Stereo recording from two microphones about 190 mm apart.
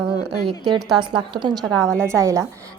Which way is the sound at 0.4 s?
25° right (ahead or behind).